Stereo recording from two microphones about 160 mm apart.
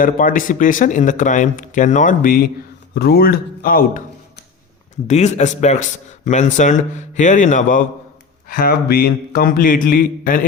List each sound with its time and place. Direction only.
0.0 s speech: 55° left (ahead or behind)
2.9 s speech: 75° left (ahead or behind)
5.0 s a man's voice: 45° left (ahead or behind)
8.4 s speech: 70° left (ahead or behind)